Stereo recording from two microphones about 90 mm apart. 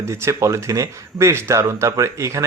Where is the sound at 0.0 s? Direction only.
30° right (ahead or behind).